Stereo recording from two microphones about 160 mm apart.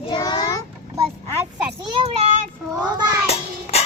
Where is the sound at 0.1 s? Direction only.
25° left (ahead or behind).